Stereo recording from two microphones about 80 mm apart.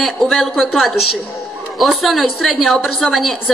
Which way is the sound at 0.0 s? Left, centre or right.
Centre.